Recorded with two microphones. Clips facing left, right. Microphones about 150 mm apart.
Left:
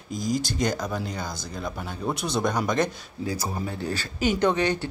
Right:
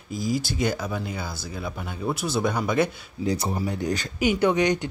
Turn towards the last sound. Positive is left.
turn(degrees=-15)  # may be behind; listen again after turning